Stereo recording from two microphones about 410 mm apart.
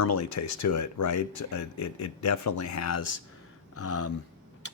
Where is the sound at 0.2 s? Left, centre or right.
Left.